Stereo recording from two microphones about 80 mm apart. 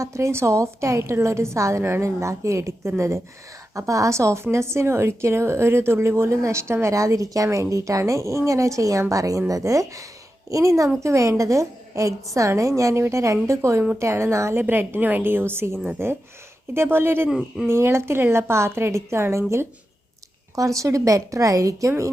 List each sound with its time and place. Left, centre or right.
0.0 s a woman's voice: right
14.6 s a woman's voice: right
17.2 s speech: centre
17.7 s a woman's voice: right